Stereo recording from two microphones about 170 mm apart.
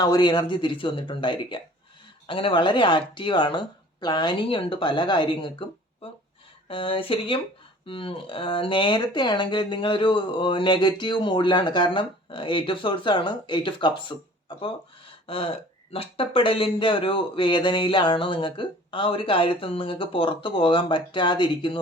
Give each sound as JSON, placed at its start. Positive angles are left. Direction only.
{"t": 0.0, "sound": "speech", "side_deg": 25}
{"t": 15.9, "sound": "speech", "side_deg": 30}